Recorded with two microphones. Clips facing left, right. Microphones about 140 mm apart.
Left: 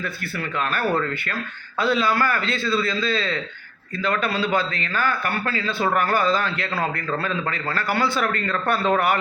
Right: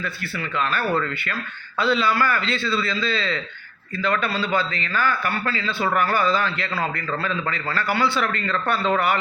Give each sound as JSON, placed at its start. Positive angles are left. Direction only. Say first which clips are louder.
{"t": 0.0, "sound": "a man's voice", "louder": "left 1 dB", "side_deg": 50}